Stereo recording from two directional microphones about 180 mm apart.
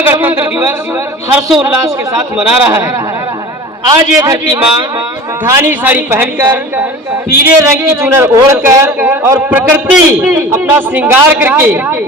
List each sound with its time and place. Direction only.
0.0 s a man's voice: 10° right (ahead or behind)
4.2 s a man's voice: 20° right (ahead or behind)